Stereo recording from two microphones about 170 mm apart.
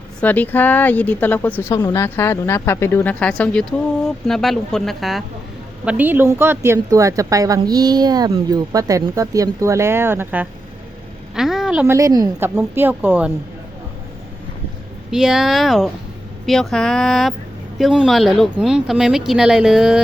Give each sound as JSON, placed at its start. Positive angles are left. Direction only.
{"t": 0.2, "sound": "a woman's voice", "side_deg": 10}
{"t": 11.9, "sound": "a woman's voice", "side_deg": -20}
{"t": 15.1, "sound": "speech", "side_deg": -5}